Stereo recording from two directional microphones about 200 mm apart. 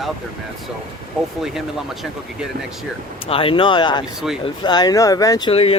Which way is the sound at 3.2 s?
25° left (ahead or behind).